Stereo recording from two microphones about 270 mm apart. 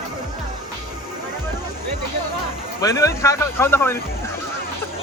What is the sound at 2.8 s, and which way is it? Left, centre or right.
Speech, centre.